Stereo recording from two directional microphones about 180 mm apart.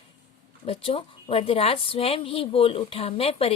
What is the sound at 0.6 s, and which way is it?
A woman's voice, 30° left (ahead or behind).